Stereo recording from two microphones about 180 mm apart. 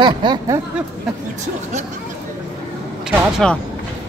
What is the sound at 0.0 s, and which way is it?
Snicker, 25° right (ahead or behind).